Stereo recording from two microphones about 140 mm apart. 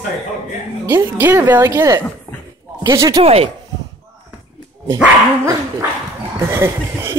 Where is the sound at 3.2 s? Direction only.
45° right (ahead or behind).